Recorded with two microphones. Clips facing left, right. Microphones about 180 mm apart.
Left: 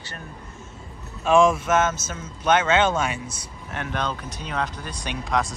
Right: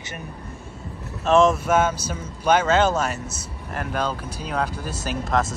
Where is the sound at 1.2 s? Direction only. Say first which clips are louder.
Right 1 dB; centre (ahead or behind).